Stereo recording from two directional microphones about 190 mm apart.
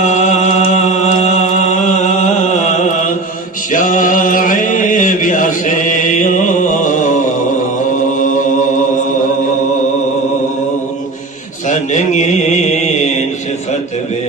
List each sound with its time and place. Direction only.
0.0 s mantra: 40° left (ahead or behind)
8.2 s chant: 45° left (ahead or behind)
11.7 s mantra: 40° left (ahead or behind)